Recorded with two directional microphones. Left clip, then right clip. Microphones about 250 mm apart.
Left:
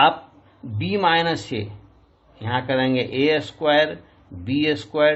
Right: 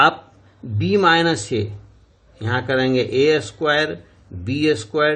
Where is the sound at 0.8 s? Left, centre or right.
Right.